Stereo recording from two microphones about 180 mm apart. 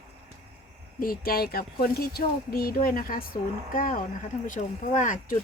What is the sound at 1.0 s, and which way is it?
Speech, 55° left (ahead or behind).